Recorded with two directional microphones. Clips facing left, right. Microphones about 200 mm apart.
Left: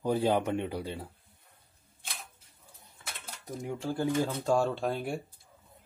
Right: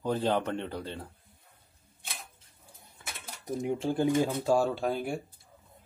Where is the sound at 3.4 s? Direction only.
20° right (ahead or behind).